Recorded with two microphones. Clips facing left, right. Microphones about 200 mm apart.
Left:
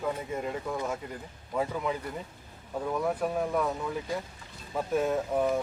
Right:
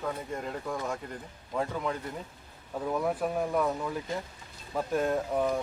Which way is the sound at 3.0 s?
Centre (ahead or behind).